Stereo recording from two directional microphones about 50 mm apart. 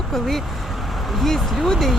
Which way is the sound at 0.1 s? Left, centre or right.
Centre.